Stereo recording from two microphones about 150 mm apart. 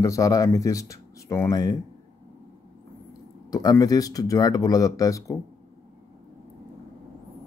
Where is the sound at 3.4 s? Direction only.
25° left (ahead or behind).